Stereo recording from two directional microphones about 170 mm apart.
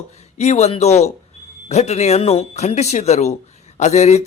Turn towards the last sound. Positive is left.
turn(degrees=45)  # may be behind; listen again after turning